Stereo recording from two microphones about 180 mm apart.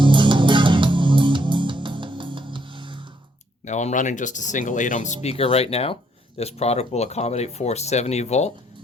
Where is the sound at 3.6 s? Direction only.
40° left (ahead or behind).